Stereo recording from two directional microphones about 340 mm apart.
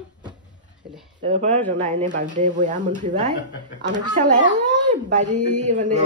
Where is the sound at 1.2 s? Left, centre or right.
Centre.